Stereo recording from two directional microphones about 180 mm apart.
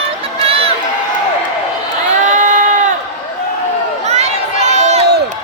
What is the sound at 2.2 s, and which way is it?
Crowd, 45° right (ahead or behind).